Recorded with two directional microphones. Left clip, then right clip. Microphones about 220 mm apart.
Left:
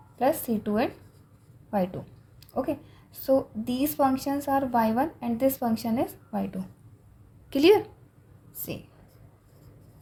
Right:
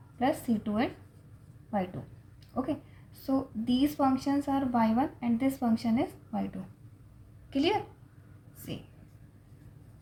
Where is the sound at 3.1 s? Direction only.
40° left (ahead or behind).